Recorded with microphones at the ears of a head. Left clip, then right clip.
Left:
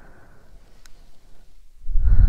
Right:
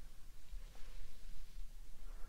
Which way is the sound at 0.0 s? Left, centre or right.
Left.